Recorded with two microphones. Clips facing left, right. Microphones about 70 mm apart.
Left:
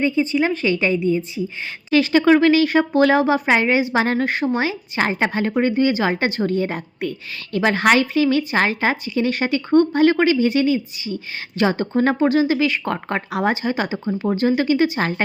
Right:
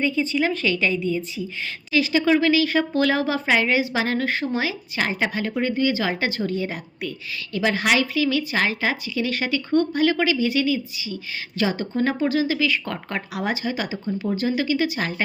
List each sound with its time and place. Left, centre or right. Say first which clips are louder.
0.0 s speech: left 3 dB; left
1.9 s speech: left 5 dB; left
2.6 s speech: left 5 dB; left